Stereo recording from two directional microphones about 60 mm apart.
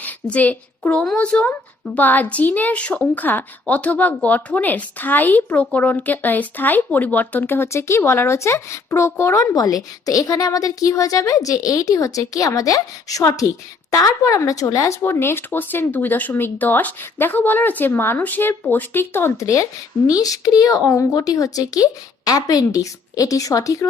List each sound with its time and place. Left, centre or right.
0.0 s a sound: left
1.1 s speech: centre
2.0 s a woman's voice: left
9.4 s a woman's voice: left
15.0 s a woman's voice: left
19.4 s speech: left
20.1 s a woman's voice: left